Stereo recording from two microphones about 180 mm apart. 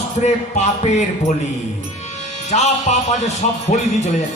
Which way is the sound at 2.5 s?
40° left (ahead or behind).